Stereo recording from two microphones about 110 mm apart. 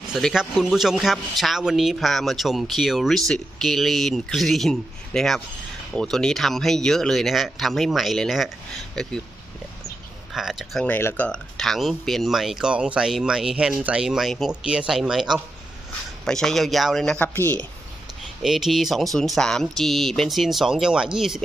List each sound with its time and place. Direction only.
0.1 s a man's voice: centre (ahead or behind)
10.3 s a man's voice: 5° right (ahead or behind)
10.8 s a man's voice: 15° left (ahead or behind)
17.3 s speech: 20° left (ahead or behind)
18.4 s a man's voice: centre (ahead or behind)